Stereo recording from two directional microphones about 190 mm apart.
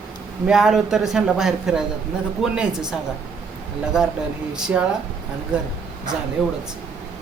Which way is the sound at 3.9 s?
5° right (ahead or behind).